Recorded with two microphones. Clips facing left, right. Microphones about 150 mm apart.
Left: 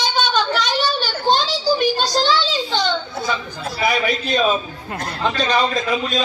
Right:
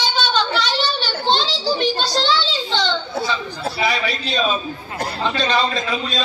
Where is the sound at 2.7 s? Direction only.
10° left (ahead or behind).